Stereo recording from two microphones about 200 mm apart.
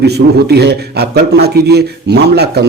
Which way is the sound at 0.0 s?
55° right (ahead or behind).